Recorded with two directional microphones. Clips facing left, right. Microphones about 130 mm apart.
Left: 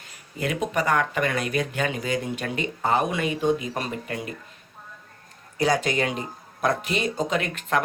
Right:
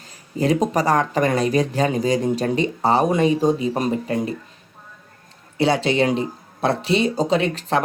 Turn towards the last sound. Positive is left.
turn(degrees=-30)  # may be behind; listen again after turning